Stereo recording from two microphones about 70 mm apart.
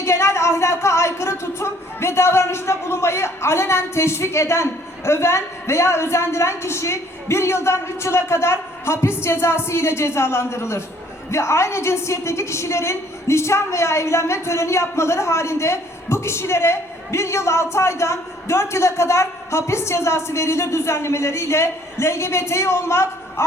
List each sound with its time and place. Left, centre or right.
0.0 s a woman's voice: left